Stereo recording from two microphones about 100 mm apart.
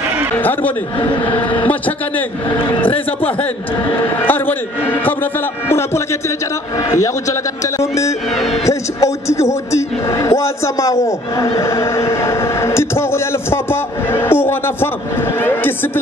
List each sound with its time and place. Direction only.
0.4 s a man's voice: 20° left (ahead or behind)
4.2 s a man's voice: 20° left (ahead or behind)